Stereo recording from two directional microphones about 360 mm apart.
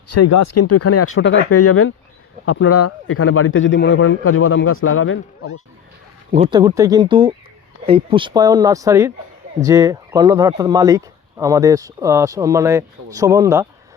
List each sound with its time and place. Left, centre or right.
0.1 s a man's voice: left
6.3 s speech: centre